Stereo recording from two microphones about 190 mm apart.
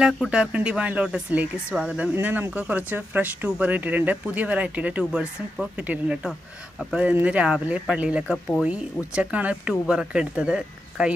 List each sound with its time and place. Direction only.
0.0 s speech: 5° right (ahead or behind)